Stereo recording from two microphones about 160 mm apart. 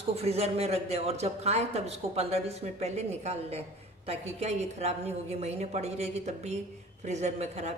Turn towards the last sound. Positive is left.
turn(degrees=-45)  # may be behind; listen again after turning